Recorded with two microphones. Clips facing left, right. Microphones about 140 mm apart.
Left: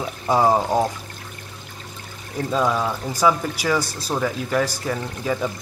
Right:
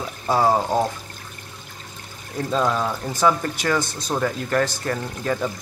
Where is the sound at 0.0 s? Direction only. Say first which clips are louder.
Left 1 dB; 15° left (ahead or behind).